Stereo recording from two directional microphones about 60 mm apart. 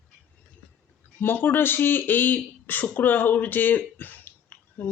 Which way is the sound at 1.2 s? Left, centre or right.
Left.